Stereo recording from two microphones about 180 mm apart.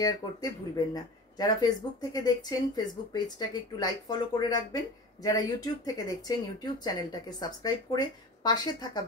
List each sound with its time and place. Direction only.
0.0 s speech: 20° left (ahead or behind)